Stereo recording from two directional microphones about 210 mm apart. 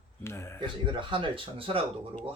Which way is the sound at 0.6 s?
20° right (ahead or behind).